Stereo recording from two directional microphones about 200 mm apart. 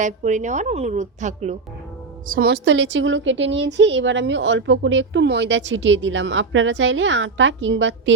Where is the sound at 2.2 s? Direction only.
45° right (ahead or behind).